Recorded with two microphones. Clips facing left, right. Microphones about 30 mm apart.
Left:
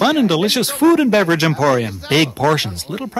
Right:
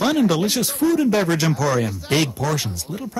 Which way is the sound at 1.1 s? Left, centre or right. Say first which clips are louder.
Left 5 dB; left.